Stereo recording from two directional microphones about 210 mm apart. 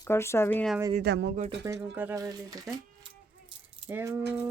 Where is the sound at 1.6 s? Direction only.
10° right (ahead or behind).